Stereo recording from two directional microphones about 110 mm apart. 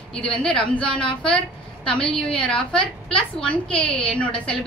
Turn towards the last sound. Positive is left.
turn(degrees=10)  # may be behind; listen again after turning